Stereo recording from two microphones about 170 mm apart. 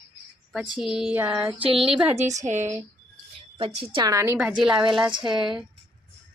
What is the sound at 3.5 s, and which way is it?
Speech, 30° right (ahead or behind).